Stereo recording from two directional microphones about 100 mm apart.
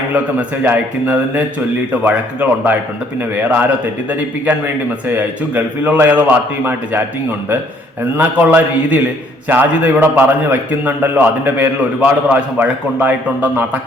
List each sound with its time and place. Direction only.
0.1 s a man's voice: 15° right (ahead or behind)
4.1 s a man's voice: 15° right (ahead or behind)